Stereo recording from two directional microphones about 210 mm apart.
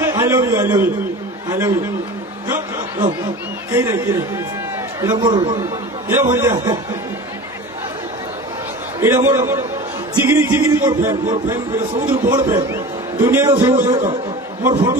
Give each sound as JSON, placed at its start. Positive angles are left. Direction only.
{"t": 0.0, "sound": "a man's voice", "side_deg": -15}
{"t": 3.7, "sound": "a man's voice", "side_deg": -15}
{"t": 9.0, "sound": "a man's voice", "side_deg": -10}
{"t": 12.3, "sound": "a man's voice", "side_deg": -20}
{"t": 13.7, "sound": "a man's voice", "side_deg": -35}
{"t": 14.6, "sound": "a man's voice", "side_deg": -20}